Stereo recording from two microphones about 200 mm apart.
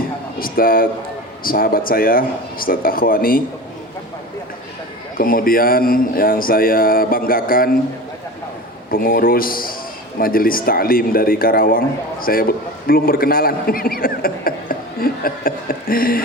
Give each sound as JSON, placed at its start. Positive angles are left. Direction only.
{"t": 0.3, "sound": "a man's voice", "side_deg": 45}
{"t": 5.1, "sound": "a man's voice", "side_deg": 45}
{"t": 8.9, "sound": "a man's voice", "side_deg": 45}